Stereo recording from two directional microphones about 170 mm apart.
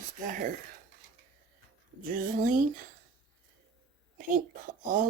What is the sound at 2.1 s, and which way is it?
Speech, 55° right (ahead or behind).